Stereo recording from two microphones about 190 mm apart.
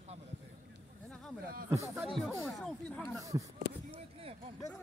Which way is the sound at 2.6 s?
Centre (ahead or behind).